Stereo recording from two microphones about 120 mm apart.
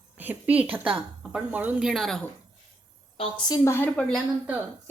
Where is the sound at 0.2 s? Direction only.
15° right (ahead or behind).